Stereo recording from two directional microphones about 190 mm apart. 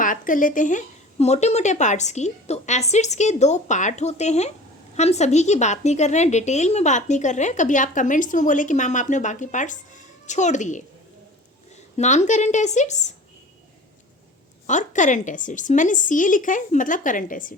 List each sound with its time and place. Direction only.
0.0 s a woman's voice: 45° left (ahead or behind)
11.9 s a woman's voice: 40° left (ahead or behind)
14.7 s a woman's voice: 40° left (ahead or behind)